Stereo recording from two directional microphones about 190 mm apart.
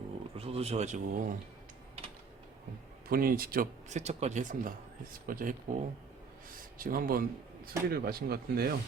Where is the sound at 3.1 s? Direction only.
50° right (ahead or behind).